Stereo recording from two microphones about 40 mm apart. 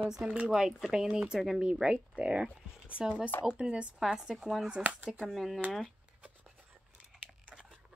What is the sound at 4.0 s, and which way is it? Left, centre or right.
Speech, centre.